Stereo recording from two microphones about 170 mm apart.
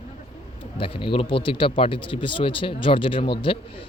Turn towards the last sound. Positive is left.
turn(degrees=30)  # may be behind; listen again after turning